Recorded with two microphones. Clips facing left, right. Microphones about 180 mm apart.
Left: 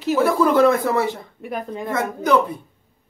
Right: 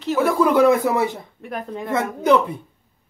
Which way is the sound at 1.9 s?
25° right (ahead or behind).